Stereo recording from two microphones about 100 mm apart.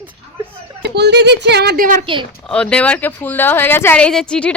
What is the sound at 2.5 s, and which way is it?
Speech, 10° left (ahead or behind).